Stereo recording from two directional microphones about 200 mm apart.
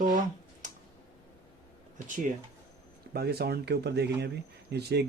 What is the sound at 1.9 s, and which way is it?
Speech, 40° right (ahead or behind).